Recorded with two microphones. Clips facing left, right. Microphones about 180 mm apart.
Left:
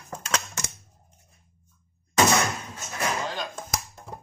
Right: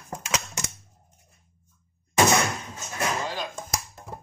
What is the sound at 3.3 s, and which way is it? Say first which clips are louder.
Music: even; centre (ahead or behind).